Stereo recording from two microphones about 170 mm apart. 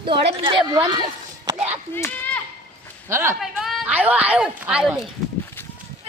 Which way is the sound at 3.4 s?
Centre (ahead or behind).